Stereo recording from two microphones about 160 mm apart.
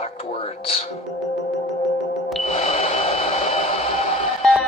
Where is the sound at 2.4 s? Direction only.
40° left (ahead or behind).